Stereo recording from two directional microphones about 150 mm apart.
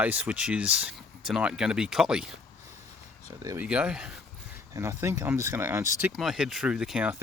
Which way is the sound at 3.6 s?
10° right (ahead or behind).